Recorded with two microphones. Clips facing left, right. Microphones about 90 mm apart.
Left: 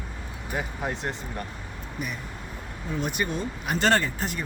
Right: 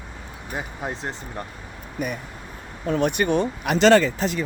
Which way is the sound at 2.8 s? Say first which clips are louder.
Right 8 dB; 65° right (ahead or behind).